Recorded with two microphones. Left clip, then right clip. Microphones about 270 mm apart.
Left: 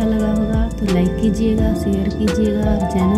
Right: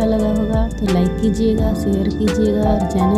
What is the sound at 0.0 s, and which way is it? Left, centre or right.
Music, centre.